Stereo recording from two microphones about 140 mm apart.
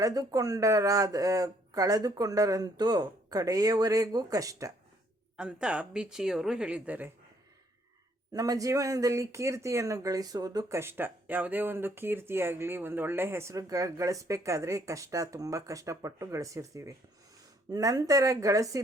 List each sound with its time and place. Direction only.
0.0 s speech: 25° right (ahead or behind)
5.4 s speech: 5° right (ahead or behind)
8.3 s speech: 25° right (ahead or behind)